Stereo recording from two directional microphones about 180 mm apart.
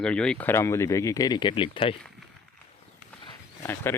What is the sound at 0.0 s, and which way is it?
Speech, 5° left (ahead or behind).